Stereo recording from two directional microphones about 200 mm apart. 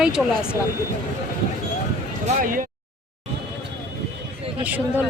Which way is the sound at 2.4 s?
45° right (ahead or behind).